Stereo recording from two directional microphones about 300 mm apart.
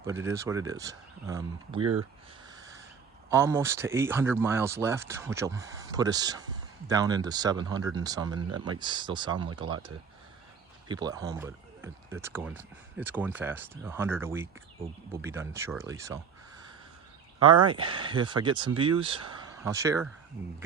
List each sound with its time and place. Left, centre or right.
0.0 s speech: centre
1.8 s speech: right
3.2 s speech: centre
8.4 s speech: right
8.8 s speech: centre
10.8 s speech: centre
17.7 s speech: centre